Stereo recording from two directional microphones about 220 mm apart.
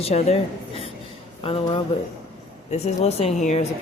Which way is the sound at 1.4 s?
25° left (ahead or behind).